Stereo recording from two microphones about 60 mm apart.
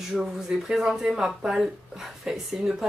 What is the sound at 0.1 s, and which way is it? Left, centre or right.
A woman's voice, centre.